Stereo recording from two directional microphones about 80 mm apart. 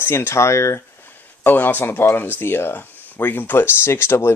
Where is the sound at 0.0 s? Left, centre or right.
Left.